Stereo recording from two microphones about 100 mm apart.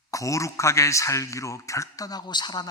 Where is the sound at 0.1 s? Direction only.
35° left (ahead or behind).